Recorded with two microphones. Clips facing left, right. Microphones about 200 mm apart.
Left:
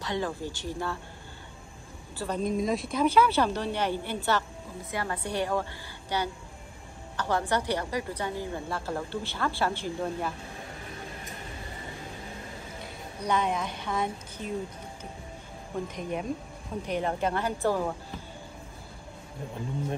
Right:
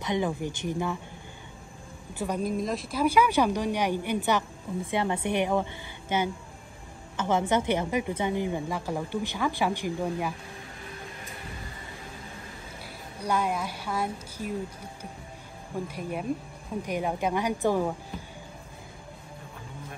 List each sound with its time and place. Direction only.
0.0 s a woman's voice: 20° right (ahead or behind)
2.1 s a woman's voice: 10° right (ahead or behind)
12.8 s a woman's voice: 10° right (ahead or behind)
15.9 s a woman's voice: 5° right (ahead or behind)